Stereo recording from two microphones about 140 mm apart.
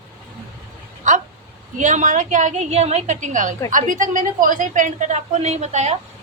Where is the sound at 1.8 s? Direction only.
60° right (ahead or behind).